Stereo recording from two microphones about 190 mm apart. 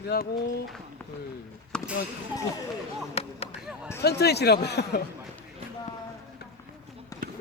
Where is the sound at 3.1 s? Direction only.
35° left (ahead or behind).